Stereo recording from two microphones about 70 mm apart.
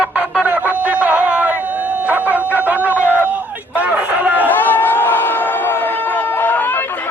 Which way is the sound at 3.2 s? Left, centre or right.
Right.